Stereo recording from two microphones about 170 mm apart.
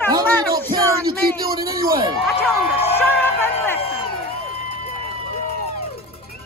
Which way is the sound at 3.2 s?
15° left (ahead or behind).